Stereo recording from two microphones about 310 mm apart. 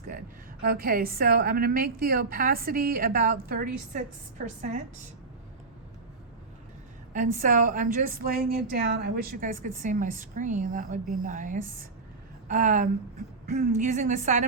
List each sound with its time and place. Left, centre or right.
0.6 s a woman's voice: right
7.1 s a woman's voice: right